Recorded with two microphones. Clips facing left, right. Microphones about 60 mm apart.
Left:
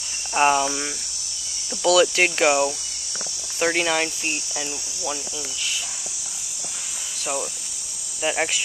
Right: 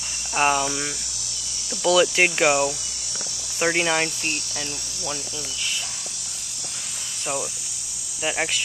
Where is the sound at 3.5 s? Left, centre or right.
Centre.